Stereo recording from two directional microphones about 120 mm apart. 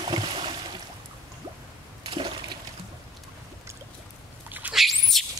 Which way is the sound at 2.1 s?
45° right (ahead or behind).